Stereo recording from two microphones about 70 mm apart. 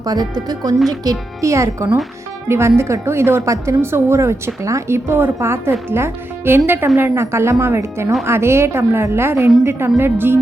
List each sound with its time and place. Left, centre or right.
0.0 s speech: right
1.4 s speech: right